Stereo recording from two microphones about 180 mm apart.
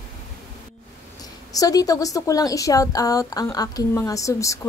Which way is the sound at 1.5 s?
20° left (ahead or behind).